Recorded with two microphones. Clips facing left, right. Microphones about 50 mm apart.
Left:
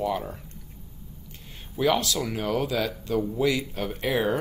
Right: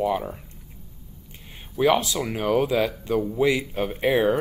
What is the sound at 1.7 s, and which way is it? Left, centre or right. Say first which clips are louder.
Speech: right 3 dB; right.